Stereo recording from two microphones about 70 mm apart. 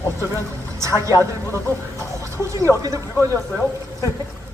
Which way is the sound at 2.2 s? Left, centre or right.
Right.